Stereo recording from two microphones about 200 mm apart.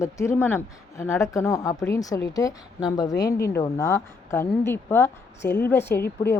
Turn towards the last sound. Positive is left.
turn(degrees=10)  # may be behind; listen again after turning